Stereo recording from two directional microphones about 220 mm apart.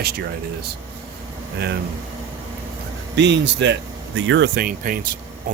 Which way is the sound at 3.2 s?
55° right (ahead or behind).